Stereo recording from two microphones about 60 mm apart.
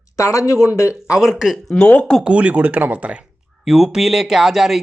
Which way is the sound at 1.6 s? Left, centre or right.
Centre.